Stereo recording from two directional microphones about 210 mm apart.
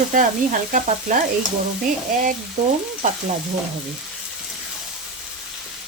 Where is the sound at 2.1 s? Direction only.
40° right (ahead or behind).